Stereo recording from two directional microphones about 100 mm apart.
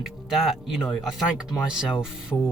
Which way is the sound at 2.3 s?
20° left (ahead or behind).